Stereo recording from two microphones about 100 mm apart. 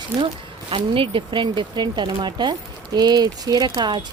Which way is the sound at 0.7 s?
60° right (ahead or behind).